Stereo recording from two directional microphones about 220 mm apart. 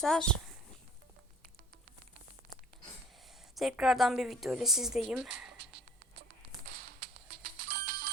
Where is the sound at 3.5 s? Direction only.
Centre (ahead or behind).